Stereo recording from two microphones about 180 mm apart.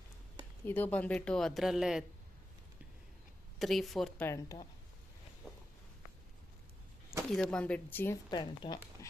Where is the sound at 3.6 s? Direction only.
Centre (ahead or behind).